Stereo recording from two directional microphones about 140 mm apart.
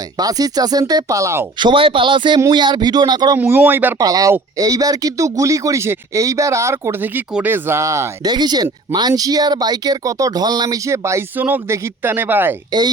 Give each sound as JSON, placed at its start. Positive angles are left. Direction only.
{"t": 0.2, "sound": "speech", "side_deg": -25}
{"t": 1.5, "sound": "speech", "side_deg": -35}
{"t": 3.3, "sound": "speech", "side_deg": -15}
{"t": 4.0, "sound": "speech", "side_deg": -25}